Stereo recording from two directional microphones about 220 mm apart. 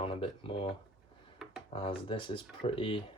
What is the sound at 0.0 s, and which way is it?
Speech, 25° left (ahead or behind).